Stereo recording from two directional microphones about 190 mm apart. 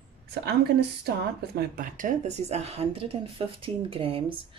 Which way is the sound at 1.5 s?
50° right (ahead or behind).